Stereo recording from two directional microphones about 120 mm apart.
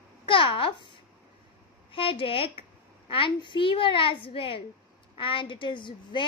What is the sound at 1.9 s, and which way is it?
A woman's voice, 50° left (ahead or behind).